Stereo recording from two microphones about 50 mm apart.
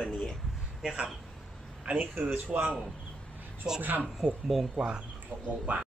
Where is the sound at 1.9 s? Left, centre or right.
Right.